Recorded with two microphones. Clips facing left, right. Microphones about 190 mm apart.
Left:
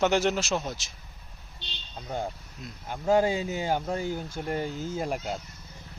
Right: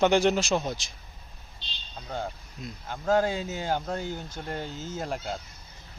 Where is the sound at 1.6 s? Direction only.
70° left (ahead or behind).